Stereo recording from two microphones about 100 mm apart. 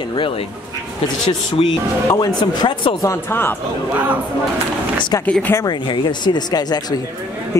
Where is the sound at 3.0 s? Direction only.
20° left (ahead or behind).